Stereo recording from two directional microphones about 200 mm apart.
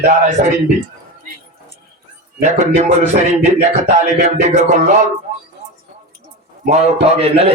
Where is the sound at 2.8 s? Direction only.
35° right (ahead or behind).